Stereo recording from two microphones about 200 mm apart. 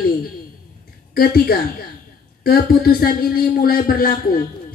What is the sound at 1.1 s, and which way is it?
A man's voice, 50° left (ahead or behind).